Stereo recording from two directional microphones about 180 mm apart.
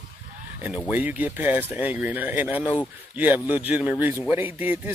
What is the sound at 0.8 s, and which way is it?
Speech, 10° right (ahead or behind).